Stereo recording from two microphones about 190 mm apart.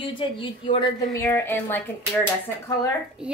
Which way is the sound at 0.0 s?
25° left (ahead or behind).